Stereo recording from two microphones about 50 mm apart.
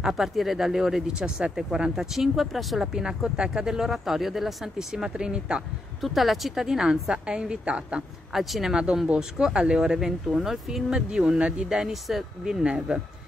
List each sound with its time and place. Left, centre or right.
0.0 s speech: centre
1.0 s speech: centre
2.9 s speech: centre
4.9 s speech: centre
5.9 s speech: centre; by 8.0 s right
8.3 s speech: centre
8.7 s speech: centre
10.9 s speech: centre
11.7 s speech: centre